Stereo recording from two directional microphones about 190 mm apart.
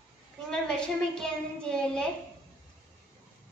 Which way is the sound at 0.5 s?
5° left (ahead or behind).